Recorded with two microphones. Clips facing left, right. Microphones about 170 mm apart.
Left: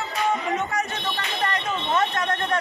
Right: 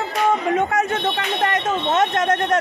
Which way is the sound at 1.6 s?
45° right (ahead or behind).